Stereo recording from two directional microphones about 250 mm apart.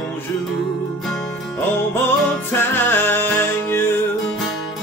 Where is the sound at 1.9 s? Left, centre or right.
Centre.